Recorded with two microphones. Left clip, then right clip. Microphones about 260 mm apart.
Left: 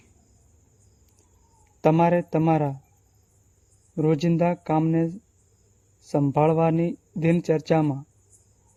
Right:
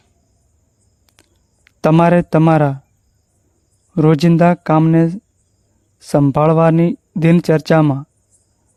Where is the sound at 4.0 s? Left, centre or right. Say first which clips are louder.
Right 10 dB; right.